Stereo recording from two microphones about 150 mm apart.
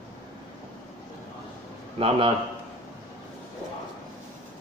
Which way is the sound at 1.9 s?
35° right (ahead or behind).